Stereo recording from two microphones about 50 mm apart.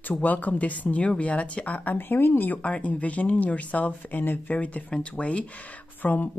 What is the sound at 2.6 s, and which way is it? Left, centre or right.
Speech, left.